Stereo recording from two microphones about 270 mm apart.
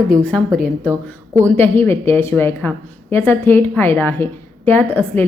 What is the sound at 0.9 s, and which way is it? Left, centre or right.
Speech, centre.